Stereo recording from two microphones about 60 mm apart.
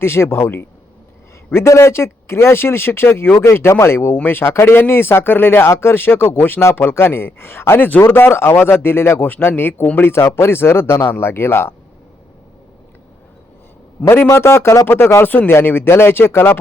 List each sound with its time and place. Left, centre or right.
0.0 s a man's voice: left
6.6 s a man's voice: left
7.8 s speech: left
8.1 s a man's voice: left
10.1 s speech: left
14.0 s speech: left
14.3 s a man's voice: left